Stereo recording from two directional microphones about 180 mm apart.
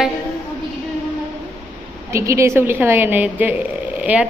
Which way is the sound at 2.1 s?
15° right (ahead or behind).